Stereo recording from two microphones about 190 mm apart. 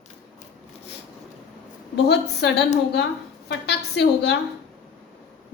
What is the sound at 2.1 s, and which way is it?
A woman's voice, 60° left (ahead or behind).